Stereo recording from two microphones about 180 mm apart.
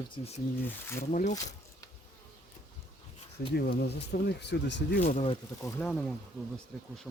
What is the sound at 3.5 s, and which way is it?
Speech, 65° left (ahead or behind).